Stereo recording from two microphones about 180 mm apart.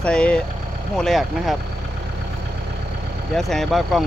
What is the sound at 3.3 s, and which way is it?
Speech, centre (ahead or behind).